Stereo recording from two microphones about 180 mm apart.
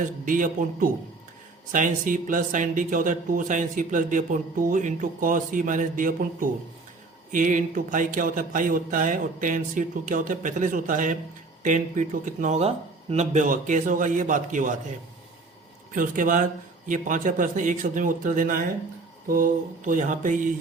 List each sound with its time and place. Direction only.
0.0 s speech: 45° right (ahead or behind)
15.9 s speech: 50° right (ahead or behind)